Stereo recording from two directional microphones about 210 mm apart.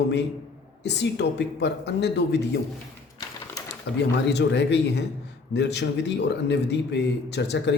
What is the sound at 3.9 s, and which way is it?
Speech, 55° left (ahead or behind).